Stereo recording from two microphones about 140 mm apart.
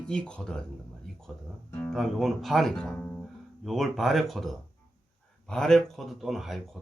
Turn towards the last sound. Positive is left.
turn(degrees=0)  # may be behind; listen again after turning